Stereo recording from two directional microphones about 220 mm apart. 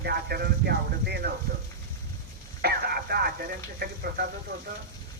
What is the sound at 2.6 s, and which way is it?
Speech, 45° right (ahead or behind).